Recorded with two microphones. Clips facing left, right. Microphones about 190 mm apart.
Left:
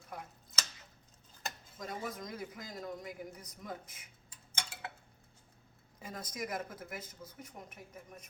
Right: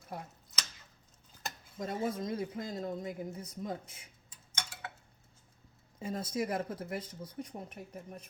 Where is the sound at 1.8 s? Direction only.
30° right (ahead or behind).